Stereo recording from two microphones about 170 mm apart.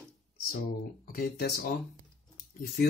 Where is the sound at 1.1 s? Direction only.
65° left (ahead or behind).